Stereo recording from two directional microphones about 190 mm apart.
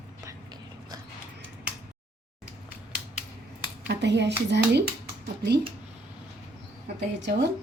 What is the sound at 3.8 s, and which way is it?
Speech, 65° right (ahead or behind).